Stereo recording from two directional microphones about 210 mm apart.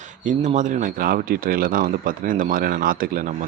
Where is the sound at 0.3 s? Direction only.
35° right (ahead or behind).